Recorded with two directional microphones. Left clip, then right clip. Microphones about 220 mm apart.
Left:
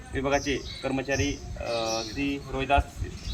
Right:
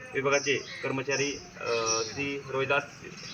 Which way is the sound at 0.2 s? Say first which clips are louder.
Even; 15° left (ahead or behind).